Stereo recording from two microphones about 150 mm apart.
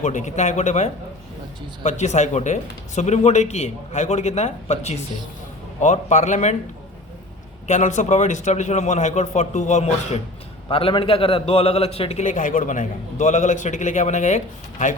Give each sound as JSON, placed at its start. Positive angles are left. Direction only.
{"t": 0.0, "sound": "a man's voice", "side_deg": 55}
{"t": 7.7, "sound": "a man's voice", "side_deg": 55}
{"t": 10.7, "sound": "a man's voice", "side_deg": 35}